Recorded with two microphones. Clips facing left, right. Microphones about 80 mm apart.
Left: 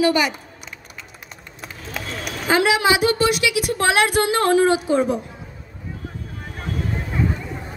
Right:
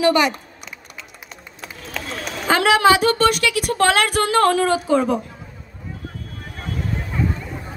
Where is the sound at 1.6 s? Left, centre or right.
Centre.